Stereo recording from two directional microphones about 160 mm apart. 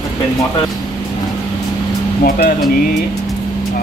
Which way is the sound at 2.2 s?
65° left (ahead or behind).